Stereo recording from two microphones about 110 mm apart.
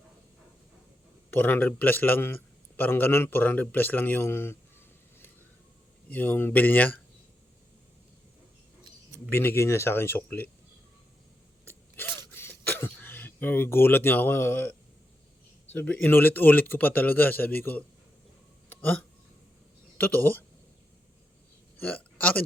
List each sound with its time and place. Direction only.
1.3 s a man's voice: 15° left (ahead or behind)
6.1 s a man's voice: 15° left (ahead or behind)
9.3 s speech: 20° left (ahead or behind)
11.6 s a sound: 20° left (ahead or behind)
15.7 s a man's voice: 15° left (ahead or behind)
18.7 s a sound: 15° left (ahead or behind)
20.0 s a man's voice: 15° left (ahead or behind)
21.8 s speech: 15° left (ahead or behind)